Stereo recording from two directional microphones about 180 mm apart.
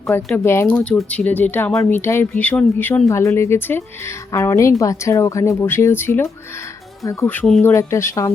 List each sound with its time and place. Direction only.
0.3 s speech: 10° left (ahead or behind)
7.6 s speech: 15° left (ahead or behind)